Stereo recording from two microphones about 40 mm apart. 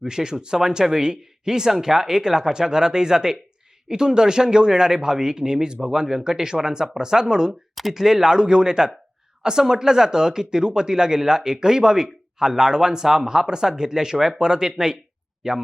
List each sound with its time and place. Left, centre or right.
0.0 s speech: centre
7.8 s speech: centre